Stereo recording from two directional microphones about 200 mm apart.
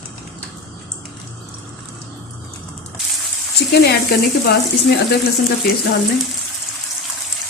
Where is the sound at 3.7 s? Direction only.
55° left (ahead or behind).